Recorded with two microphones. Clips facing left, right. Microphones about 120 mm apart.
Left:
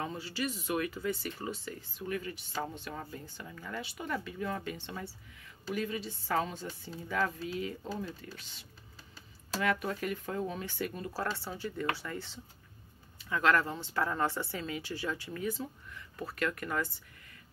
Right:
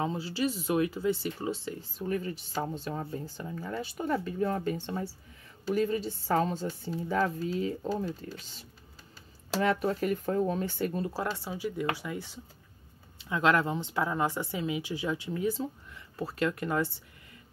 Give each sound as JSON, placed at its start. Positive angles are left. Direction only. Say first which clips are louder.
{"t": 0.0, "sound": "speech", "louder": "right 6 dB", "side_deg": -25}
{"t": 9.6, "sound": "speech", "louder": "right 5 dB", "side_deg": -30}
{"t": 11.3, "sound": "speech", "louder": "right 4 dB", "side_deg": -15}